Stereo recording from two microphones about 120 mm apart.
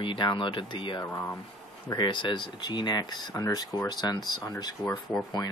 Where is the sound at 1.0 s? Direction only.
15° left (ahead or behind).